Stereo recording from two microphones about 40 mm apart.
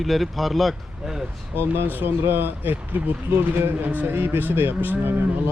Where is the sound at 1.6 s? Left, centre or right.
Right.